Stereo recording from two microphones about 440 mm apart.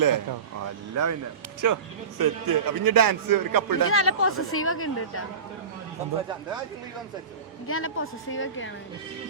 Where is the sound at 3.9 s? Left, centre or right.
Left.